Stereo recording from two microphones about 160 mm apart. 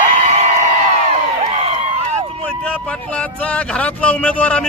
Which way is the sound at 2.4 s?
10° left (ahead or behind).